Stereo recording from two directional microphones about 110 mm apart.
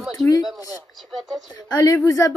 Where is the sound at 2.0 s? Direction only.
30° left (ahead or behind).